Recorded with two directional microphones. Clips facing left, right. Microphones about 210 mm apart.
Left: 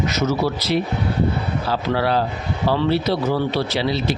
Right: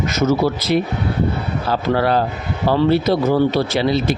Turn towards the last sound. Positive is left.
turn(degrees=-50)  # may be behind; listen again after turning